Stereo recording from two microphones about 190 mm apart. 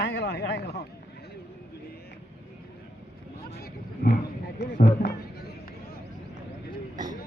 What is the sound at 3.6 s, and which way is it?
Roaring cats, 50° left (ahead or behind).